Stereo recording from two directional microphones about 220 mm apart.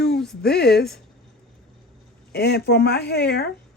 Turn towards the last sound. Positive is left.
turn(degrees=45)  # may be behind; listen again after turning